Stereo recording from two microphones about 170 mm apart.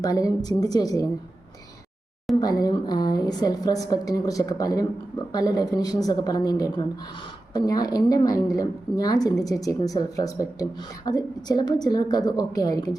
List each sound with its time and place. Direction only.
0.0 s speech: 20° left (ahead or behind)
2.4 s speech: 25° left (ahead or behind)